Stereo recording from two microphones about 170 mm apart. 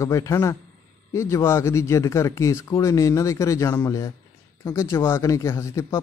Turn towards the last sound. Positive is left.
turn(degrees=15)  # may be behind; listen again after turning